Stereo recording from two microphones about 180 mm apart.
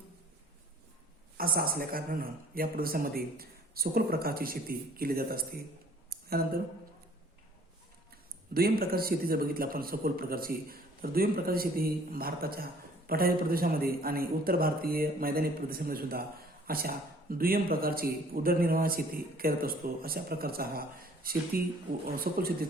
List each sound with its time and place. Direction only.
1.4 s speech: 55° right (ahead or behind)
6.1 s a sound: 55° right (ahead or behind)
8.1 s speech: 55° right (ahead or behind)